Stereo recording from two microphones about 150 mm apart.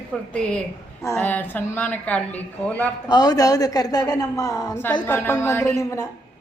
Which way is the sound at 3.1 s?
25° left (ahead or behind).